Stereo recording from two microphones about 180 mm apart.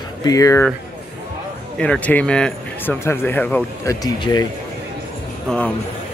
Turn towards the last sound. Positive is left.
turn(degrees=5)  # may be behind; listen again after turning